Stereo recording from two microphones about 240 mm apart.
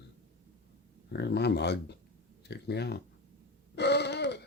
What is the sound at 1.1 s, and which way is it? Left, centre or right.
Speech, left.